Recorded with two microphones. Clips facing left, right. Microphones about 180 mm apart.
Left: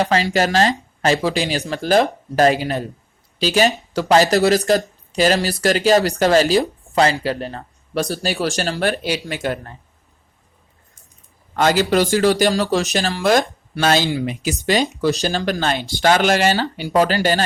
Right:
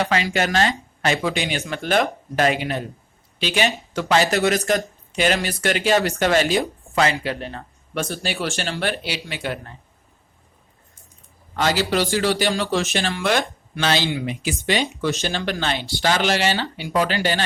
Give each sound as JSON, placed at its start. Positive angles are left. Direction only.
{"t": 0.0, "sound": "speech", "side_deg": 35}
{"t": 11.5, "sound": "speech", "side_deg": 45}